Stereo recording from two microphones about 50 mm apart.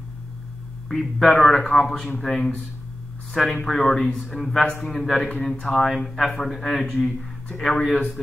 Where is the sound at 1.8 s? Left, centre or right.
Centre.